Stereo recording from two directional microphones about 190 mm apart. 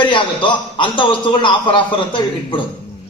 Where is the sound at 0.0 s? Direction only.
25° left (ahead or behind).